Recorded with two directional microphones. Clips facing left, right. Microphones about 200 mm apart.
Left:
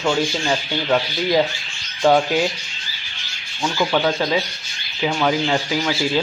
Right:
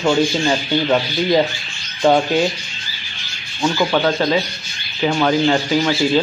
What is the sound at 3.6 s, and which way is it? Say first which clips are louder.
Speech: right 3 dB; centre (ahead or behind).